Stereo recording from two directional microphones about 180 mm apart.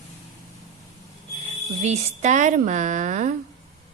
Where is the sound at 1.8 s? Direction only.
40° right (ahead or behind).